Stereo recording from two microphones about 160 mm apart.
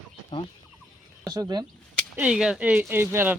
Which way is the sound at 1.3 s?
25° right (ahead or behind).